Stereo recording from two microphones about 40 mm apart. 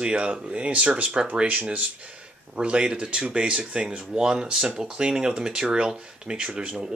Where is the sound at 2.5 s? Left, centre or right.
Right.